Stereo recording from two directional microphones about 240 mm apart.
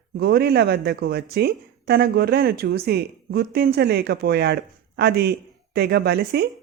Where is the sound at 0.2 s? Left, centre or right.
Right.